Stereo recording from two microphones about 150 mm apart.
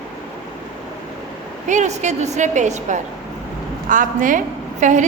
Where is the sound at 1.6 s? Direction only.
50° right (ahead or behind).